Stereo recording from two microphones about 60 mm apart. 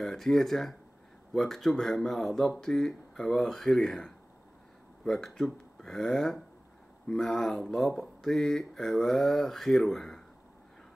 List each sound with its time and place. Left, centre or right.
0.0 s speech: centre